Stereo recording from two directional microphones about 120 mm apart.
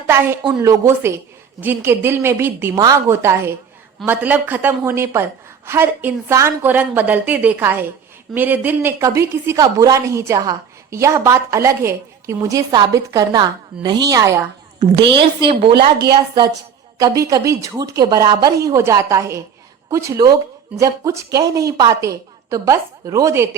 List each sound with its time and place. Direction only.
0.6 s a woman's voice: 25° right (ahead or behind)
2.7 s a woman's voice: 30° right (ahead or behind)
3.1 s a woman's voice: 20° right (ahead or behind)
14.8 s a woman's voice: 45° right (ahead or behind)
17.0 s a woman's voice: 30° right (ahead or behind)